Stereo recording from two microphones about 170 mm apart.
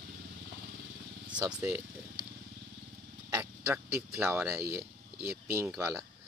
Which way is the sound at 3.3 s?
15° right (ahead or behind).